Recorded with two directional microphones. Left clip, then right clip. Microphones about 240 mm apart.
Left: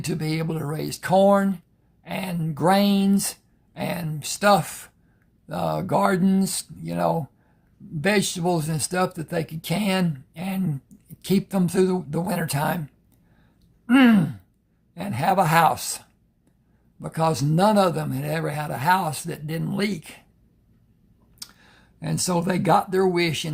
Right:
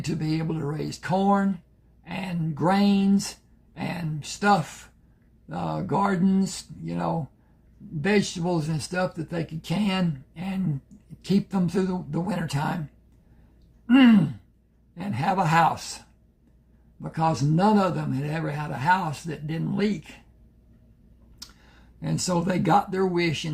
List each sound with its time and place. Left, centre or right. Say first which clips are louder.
0.0 s a man's voice: left 2 dB; left
13.8 s a man's voice: left 1 dB; left
21.3 s speech: left 3 dB; left